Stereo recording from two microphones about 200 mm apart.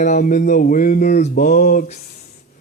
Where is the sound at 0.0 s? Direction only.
40° left (ahead or behind).